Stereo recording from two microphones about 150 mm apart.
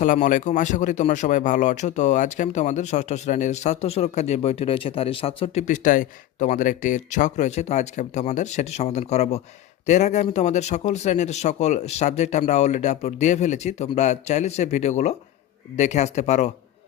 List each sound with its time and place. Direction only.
0.0 s speech: 60° left (ahead or behind); by 5.6 s 40° left (ahead or behind)
5.6 s speech: 55° left (ahead or behind)